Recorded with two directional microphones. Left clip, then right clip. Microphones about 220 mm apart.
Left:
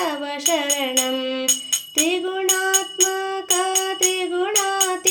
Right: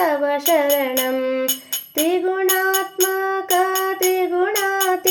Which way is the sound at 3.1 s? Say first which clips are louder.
Right 4 dB; 35° left (ahead or behind).